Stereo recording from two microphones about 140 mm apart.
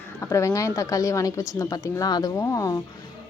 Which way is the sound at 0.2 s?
20° left (ahead or behind).